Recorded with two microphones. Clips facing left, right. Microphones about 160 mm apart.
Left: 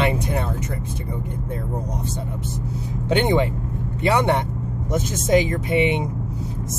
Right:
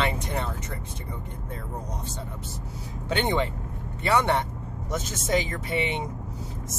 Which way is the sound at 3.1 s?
15° left (ahead or behind).